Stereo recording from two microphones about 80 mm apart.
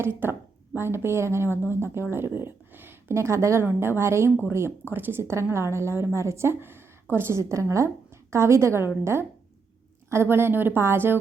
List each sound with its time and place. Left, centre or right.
0.0 s a woman's voice: right
10.1 s a woman's voice: right